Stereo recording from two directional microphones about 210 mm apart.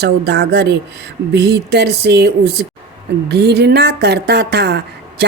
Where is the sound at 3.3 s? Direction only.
50° right (ahead or behind).